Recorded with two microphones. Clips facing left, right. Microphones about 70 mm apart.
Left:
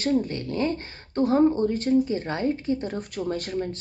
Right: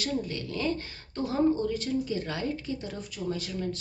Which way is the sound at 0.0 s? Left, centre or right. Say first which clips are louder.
Left 7 dB; left.